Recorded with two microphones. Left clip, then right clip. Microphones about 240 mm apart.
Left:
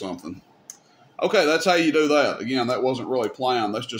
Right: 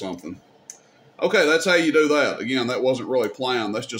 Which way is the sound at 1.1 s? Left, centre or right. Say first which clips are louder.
Right 1 dB; centre.